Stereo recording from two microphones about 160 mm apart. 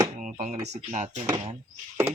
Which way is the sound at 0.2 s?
55° right (ahead or behind).